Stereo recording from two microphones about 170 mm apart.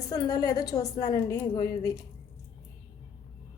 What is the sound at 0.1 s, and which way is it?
A woman's voice, 20° left (ahead or behind).